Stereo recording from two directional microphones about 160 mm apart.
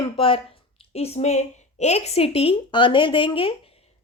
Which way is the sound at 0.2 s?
35° left (ahead or behind).